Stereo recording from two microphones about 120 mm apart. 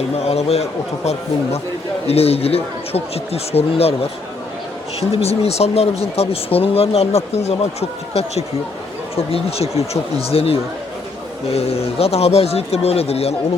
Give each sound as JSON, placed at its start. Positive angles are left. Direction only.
{"t": 0.3, "sound": "speech", "side_deg": 60}
{"t": 2.0, "sound": "speech", "side_deg": 55}
{"t": 4.9, "sound": "speech", "side_deg": 55}